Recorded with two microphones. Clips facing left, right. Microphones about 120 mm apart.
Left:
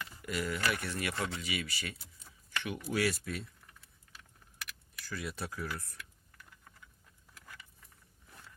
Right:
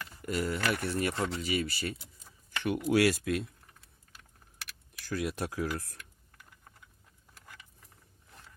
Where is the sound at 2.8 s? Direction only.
85° right.